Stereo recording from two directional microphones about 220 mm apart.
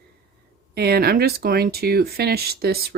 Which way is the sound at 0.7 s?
45° right (ahead or behind).